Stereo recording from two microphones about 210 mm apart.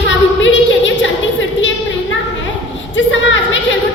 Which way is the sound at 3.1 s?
65° left (ahead or behind).